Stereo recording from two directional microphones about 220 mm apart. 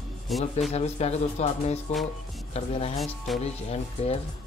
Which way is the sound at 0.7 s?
30° left (ahead or behind).